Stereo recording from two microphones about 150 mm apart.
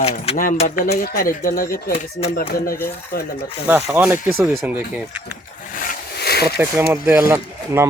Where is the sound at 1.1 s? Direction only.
70° left (ahead or behind).